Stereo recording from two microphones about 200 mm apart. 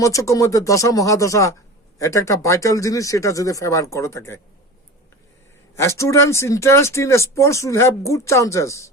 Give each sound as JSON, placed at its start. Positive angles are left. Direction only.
{"t": 0.0, "sound": "speech", "side_deg": 15}
{"t": 5.7, "sound": "speech", "side_deg": 15}